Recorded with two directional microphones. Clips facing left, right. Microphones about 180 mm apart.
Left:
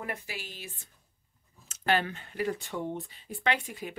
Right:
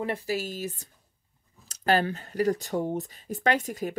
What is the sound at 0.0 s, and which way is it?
Speech, 35° right (ahead or behind).